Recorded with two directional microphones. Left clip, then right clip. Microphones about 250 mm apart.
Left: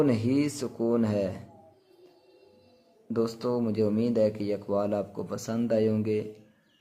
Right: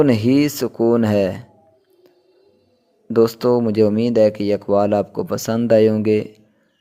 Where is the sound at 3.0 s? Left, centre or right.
Right.